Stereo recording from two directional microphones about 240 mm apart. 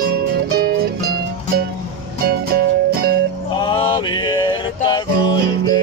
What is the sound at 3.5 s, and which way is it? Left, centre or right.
Music, left.